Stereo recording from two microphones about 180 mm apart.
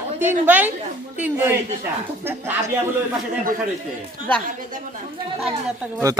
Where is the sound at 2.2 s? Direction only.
10° right (ahead or behind).